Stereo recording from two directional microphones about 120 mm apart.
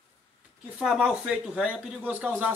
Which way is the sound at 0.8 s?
5° right (ahead or behind).